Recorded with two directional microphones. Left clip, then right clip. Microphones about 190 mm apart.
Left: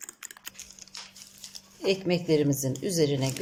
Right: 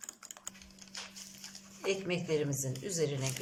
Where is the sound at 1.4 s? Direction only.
25° left (ahead or behind).